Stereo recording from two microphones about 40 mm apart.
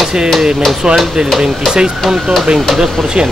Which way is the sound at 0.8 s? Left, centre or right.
Centre.